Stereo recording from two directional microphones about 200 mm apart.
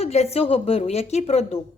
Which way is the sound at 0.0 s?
30° left (ahead or behind).